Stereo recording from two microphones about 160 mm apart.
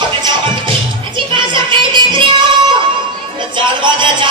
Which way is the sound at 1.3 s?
30° right (ahead or behind).